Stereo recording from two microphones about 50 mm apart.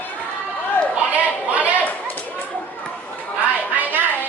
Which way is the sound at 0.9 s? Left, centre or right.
Right.